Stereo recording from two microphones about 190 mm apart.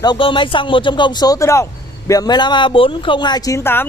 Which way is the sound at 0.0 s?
25° left (ahead or behind).